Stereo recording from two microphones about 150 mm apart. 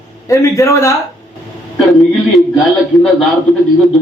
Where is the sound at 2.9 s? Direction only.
Centre (ahead or behind).